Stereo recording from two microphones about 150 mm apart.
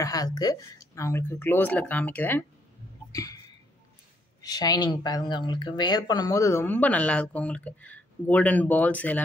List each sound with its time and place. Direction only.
0.0 s speech: 25° left (ahead or behind)
3.1 s a sound: 25° left (ahead or behind)
4.4 s speech: 25° left (ahead or behind)